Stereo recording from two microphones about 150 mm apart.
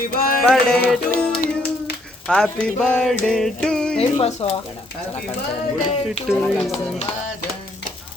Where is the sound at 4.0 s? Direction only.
40° left (ahead or behind).